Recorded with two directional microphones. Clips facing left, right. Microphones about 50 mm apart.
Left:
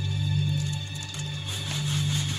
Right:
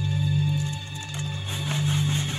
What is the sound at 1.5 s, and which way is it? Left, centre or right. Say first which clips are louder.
Music: right 5 dB; right.